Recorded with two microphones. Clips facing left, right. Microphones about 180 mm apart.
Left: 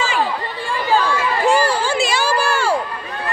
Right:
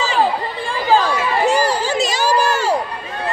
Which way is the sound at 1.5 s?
40° right (ahead or behind).